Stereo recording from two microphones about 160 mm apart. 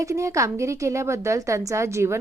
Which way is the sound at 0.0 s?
20° right (ahead or behind).